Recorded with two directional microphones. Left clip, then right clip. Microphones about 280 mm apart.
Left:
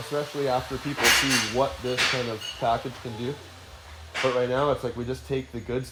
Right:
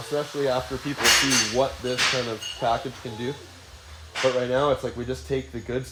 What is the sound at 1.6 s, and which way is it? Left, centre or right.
Speech, centre.